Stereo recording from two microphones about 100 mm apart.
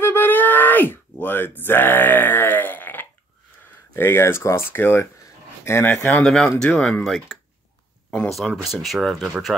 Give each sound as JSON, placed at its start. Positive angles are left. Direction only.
{"t": 0.0, "sound": "groan", "side_deg": 20}
{"t": 3.9, "sound": "speech", "side_deg": 25}
{"t": 6.2, "sound": "speech", "side_deg": 5}